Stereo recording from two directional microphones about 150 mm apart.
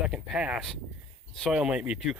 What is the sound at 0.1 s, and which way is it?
Speech, 10° right (ahead or behind).